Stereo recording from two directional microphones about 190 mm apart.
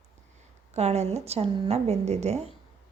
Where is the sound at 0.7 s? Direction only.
35° right (ahead or behind).